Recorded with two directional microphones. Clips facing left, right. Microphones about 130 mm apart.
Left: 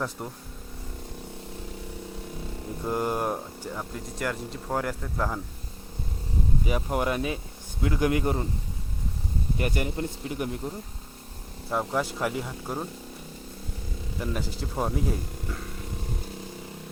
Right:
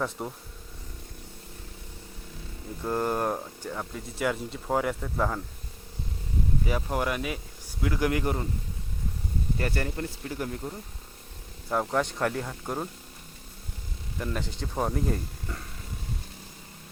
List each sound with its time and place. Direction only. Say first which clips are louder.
0.2 s speech: right 2 dB; centre (ahead or behind)
2.8 s speech: even; 10° left (ahead or behind)
6.7 s speech: left 2 dB; 20° left (ahead or behind)
9.6 s speech: left 3 dB; 15° left (ahead or behind)
11.7 s speech: right 1 dB; centre (ahead or behind)
14.2 s speech: left 1 dB; 5° left (ahead or behind)